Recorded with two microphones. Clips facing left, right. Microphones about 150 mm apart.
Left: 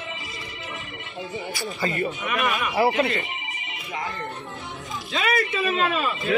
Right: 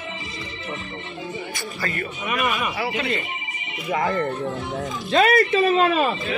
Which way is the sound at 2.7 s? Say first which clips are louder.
Left 6 dB; 45° left (ahead or behind).